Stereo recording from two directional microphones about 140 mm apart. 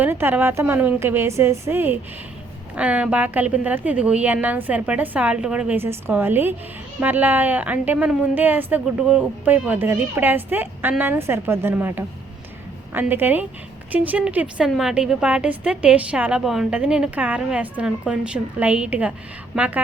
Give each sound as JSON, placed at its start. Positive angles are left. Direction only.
{"t": 0.0, "sound": "a woman's voice", "side_deg": -15}